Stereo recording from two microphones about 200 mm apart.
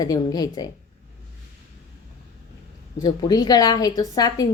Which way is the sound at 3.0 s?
20° left (ahead or behind).